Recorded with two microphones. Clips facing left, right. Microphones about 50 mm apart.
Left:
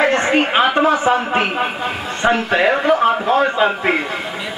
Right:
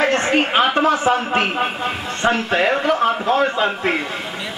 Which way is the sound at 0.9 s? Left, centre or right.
Centre.